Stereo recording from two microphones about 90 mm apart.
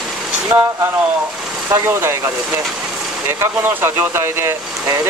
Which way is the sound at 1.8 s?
30° right (ahead or behind).